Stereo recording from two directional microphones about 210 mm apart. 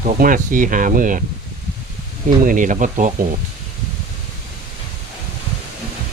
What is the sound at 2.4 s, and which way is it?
Speech, 40° right (ahead or behind).